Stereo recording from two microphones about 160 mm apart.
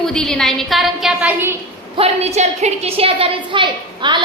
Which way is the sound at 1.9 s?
40° right (ahead or behind).